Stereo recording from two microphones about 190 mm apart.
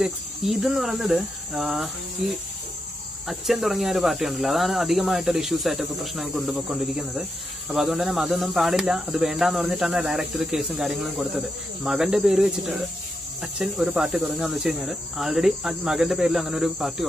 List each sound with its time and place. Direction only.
0.0 s speech: centre (ahead or behind)